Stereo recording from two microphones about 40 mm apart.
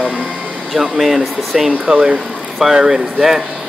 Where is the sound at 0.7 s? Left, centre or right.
Centre.